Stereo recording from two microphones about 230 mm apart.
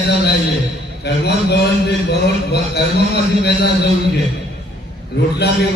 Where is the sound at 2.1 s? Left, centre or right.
Left.